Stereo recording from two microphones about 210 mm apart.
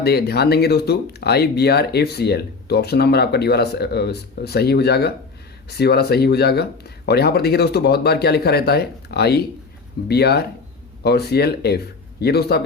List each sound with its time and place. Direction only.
0.0 s speech: 50° left (ahead or behind)